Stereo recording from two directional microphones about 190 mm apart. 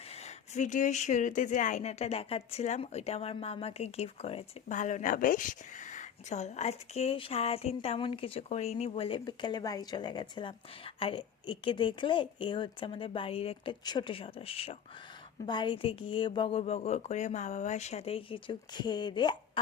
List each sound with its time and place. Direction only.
0.1 s speech: 35° left (ahead or behind)